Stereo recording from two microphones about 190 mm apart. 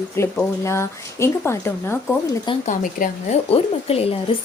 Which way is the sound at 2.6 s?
45° left (ahead or behind).